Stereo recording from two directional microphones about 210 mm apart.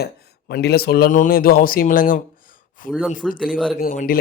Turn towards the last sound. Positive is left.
turn(degrees=40)  # may be behind; listen again after turning